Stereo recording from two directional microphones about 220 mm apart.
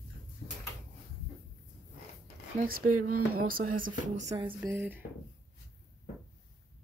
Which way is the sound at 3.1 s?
90° right.